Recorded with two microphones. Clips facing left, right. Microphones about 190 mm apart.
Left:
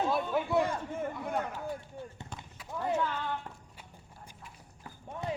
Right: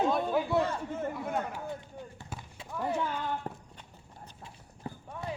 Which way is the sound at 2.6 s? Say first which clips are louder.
Left 1 dB; 20° right (ahead or behind).